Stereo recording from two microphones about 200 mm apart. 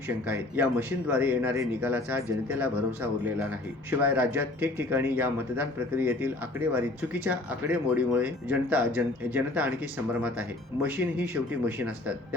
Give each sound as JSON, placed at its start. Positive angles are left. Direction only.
{"t": 0.3, "sound": "a man's voice", "side_deg": -10}